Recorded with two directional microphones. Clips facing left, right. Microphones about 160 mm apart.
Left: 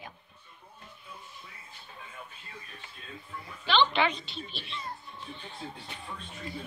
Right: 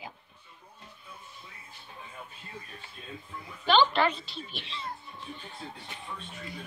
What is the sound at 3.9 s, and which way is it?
Speech, centre (ahead or behind).